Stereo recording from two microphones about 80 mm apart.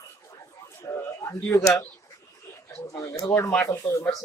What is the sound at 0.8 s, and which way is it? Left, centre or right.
Speech, left.